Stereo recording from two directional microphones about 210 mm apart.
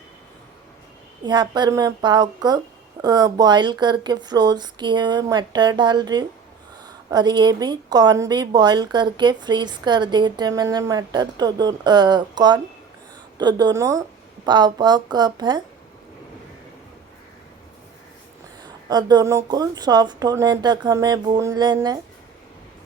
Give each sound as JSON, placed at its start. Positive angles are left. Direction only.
{"t": 1.2, "sound": "speech", "side_deg": -20}
{"t": 18.6, "sound": "speech", "side_deg": -20}